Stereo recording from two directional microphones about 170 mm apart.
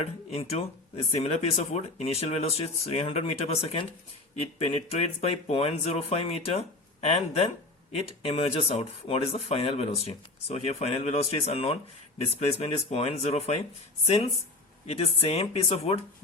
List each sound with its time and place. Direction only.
0.0 s speech: 40° left (ahead or behind)
14.8 s speech: 40° left (ahead or behind)